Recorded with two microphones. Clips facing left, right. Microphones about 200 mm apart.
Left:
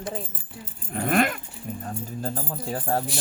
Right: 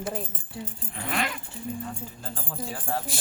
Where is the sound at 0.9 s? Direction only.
50° left (ahead or behind).